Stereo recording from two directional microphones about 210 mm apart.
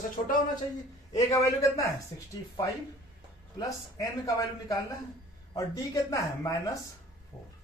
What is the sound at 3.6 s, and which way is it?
Speech, 15° left (ahead or behind).